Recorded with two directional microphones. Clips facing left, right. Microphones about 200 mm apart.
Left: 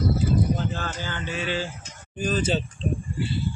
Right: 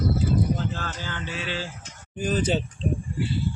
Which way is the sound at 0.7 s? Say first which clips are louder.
Left 2 dB; centre (ahead or behind).